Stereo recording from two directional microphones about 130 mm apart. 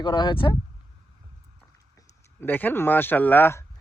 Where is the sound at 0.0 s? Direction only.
40° left (ahead or behind).